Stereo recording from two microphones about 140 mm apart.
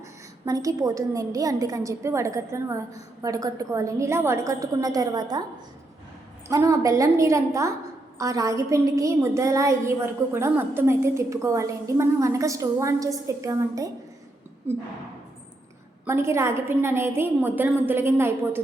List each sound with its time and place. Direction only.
0.4 s a woman's voice: 25° right (ahead or behind)
6.5 s a woman's voice: 25° right (ahead or behind)
16.0 s a woman's voice: 20° right (ahead or behind)